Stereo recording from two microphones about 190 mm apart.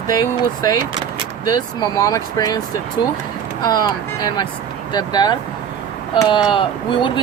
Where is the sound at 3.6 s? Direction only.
20° left (ahead or behind).